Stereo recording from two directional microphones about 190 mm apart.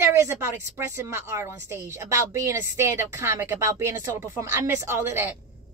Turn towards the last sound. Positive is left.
turn(degrees=-15)  # may be behind; listen again after turning